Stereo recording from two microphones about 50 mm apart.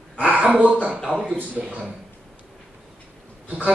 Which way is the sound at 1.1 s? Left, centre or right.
Left.